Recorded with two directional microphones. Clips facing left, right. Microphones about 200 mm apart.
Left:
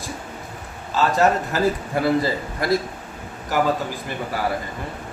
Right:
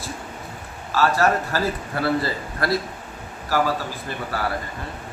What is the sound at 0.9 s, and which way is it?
A man's voice, 20° left (ahead or behind).